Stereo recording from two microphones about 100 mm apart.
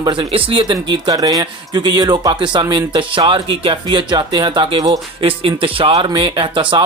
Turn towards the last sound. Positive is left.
turn(degrees=-55)  # may be behind; listen again after turning